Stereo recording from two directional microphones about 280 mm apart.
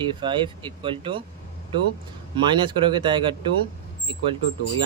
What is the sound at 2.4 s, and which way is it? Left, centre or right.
Speech, centre.